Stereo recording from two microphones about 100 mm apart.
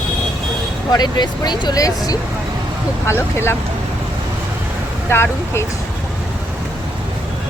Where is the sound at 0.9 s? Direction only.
45° left (ahead or behind).